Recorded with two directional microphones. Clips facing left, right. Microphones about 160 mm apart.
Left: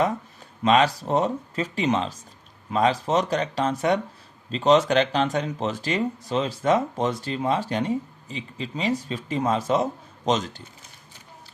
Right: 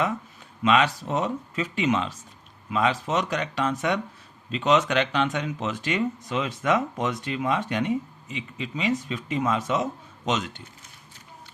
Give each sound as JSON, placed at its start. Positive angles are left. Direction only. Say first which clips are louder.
{"t": 0.6, "sound": "speech", "louder": "left 2 dB", "side_deg": 35}